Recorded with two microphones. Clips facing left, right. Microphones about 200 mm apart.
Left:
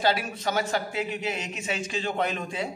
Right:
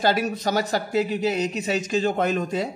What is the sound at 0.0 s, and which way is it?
Speech, 45° right (ahead or behind).